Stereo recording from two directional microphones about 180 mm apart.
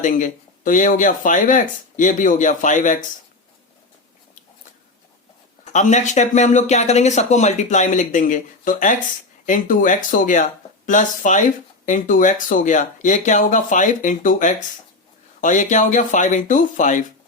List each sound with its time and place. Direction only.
0.0 s speech: 45° left (ahead or behind)
5.7 s speech: 40° left (ahead or behind)